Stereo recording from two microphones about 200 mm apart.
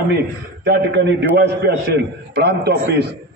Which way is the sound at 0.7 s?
55° right (ahead or behind).